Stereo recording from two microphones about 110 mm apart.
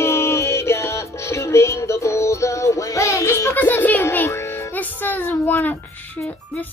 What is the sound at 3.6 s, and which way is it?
A child's voice, 15° left (ahead or behind).